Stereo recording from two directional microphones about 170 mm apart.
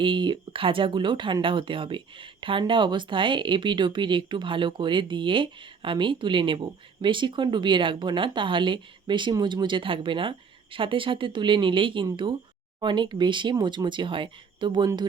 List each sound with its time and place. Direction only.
0.0 s speech: 30° right (ahead or behind)